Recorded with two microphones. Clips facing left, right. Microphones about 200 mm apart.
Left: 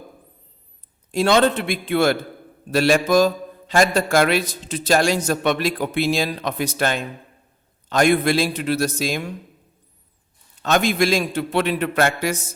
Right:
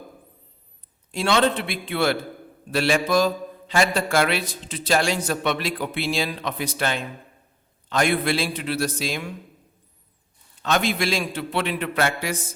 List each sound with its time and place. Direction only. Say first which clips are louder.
1.1 s a man's voice: left 4 dB; 45° left (ahead or behind)
10.6 s a man's voice: left 4 dB; 45° left (ahead or behind)